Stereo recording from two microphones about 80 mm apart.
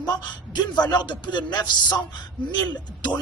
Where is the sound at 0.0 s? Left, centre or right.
Left.